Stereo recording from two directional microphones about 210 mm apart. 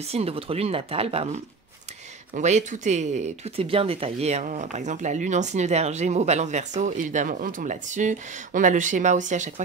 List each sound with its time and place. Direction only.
0.1 s speech: 30° right (ahead or behind)